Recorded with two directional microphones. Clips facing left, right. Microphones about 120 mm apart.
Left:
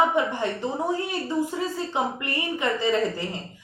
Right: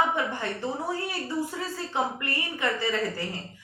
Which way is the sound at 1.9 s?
20° left (ahead or behind).